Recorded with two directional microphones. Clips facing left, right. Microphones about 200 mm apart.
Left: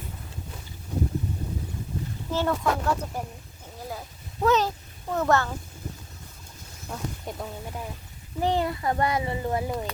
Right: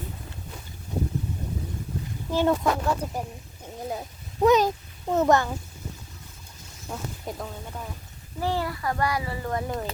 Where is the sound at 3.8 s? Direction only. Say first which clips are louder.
Right 4 dB; 20° right (ahead or behind).